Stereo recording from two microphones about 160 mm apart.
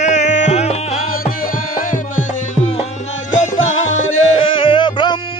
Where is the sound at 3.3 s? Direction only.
50° left (ahead or behind).